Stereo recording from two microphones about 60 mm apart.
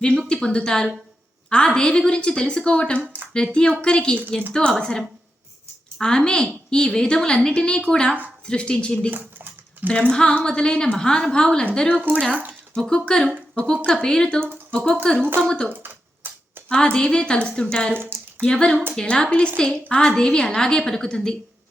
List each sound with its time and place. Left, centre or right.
0.4 s a woman's voice: centre
3.0 s a sound: right
3.3 s a woman's voice: centre
9.0 s speech: right
9.8 s a woman's voice: left
12.3 s speech: right
12.9 s a woman's voice: centre
15.7 s a sound: right
16.6 s a woman's voice: centre
17.9 s speech: right
18.4 s a woman's voice: centre